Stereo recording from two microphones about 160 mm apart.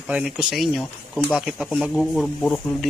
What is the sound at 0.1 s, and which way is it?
Speech, 5° right (ahead or behind).